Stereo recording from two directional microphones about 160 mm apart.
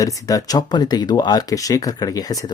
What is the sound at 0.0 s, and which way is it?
Speech, 20° left (ahead or behind).